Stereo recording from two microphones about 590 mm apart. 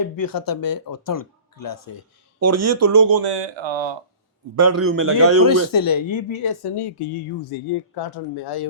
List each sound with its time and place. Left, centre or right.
0.0 s speech: left
2.4 s speech: right
4.5 s a man's voice: right
5.5 s speech: left